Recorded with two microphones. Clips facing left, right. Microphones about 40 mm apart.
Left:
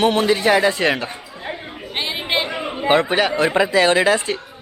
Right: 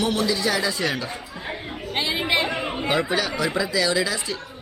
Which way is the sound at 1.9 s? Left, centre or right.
Left.